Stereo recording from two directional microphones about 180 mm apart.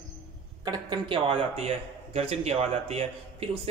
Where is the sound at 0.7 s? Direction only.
25° right (ahead or behind).